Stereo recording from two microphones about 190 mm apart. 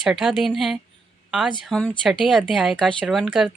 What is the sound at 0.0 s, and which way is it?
Speech, centre (ahead or behind).